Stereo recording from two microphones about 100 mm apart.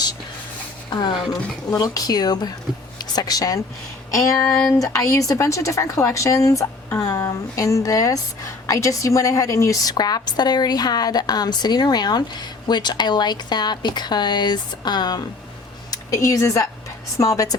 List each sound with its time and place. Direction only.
0.9 s speech: 50° left (ahead or behind)
1.7 s speech: 35° left (ahead or behind)
9.9 s a woman's voice: 45° left (ahead or behind)
15.9 s speech: 35° left (ahead or behind)